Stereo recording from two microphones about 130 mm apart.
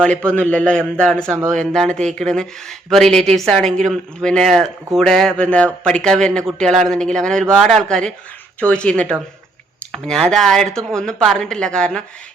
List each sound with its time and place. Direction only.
0.3 s a man's voice: 10° left (ahead or behind)